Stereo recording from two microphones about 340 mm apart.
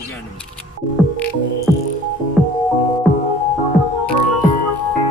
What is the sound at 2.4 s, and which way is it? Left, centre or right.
Music, centre.